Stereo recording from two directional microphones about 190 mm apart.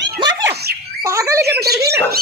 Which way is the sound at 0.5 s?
55° right (ahead or behind).